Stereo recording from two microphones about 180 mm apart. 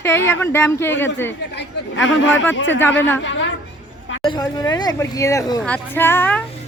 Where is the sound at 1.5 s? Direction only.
80° left.